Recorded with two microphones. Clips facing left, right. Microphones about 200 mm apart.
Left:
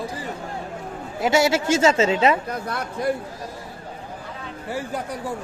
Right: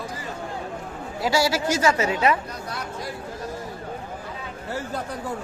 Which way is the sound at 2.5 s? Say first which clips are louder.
Left 4 dB; 55° left (ahead or behind).